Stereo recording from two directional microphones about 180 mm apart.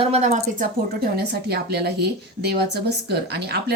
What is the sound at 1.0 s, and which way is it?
Speech, 60° right (ahead or behind).